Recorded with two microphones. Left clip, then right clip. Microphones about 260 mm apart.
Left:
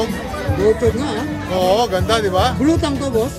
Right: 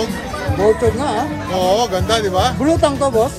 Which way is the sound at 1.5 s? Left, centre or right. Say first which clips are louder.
Even; left.